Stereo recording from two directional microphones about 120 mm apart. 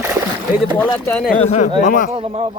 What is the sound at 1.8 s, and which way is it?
Speech, 90° left.